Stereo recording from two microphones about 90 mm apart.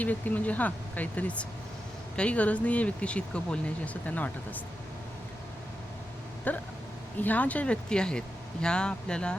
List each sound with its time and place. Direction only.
0.0 s speech: 15° left (ahead or behind)
6.5 s a sound: 20° left (ahead or behind)
7.2 s speech: 20° left (ahead or behind)